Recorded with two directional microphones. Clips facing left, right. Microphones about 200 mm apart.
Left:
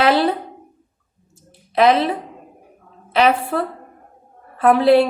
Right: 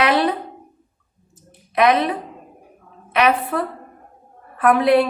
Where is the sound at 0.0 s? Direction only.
30° left (ahead or behind).